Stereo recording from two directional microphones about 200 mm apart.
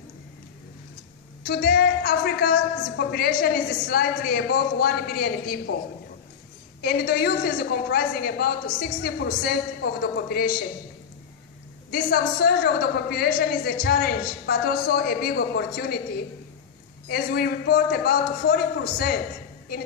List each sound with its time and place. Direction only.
1.4 s a woman's voice: 50° left (ahead or behind)
6.8 s a woman's voice: 50° left (ahead or behind)
11.9 s a woman's voice: 50° left (ahead or behind)
17.1 s a woman's voice: 50° left (ahead or behind)